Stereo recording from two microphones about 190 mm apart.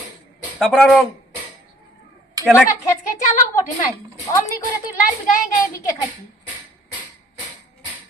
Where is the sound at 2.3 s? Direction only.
15° right (ahead or behind).